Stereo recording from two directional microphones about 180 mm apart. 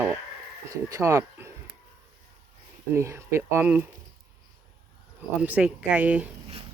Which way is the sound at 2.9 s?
15° right (ahead or behind).